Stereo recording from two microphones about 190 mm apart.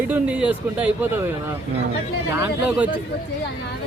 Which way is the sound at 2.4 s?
10° right (ahead or behind).